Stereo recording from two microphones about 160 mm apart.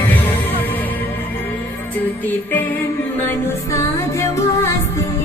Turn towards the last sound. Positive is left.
turn(degrees=15)  # may be behind; listen again after turning